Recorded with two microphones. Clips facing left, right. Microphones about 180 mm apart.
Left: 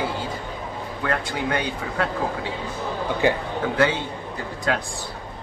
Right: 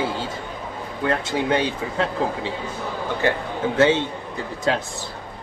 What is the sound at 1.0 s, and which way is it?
A man's voice, 25° right (ahead or behind).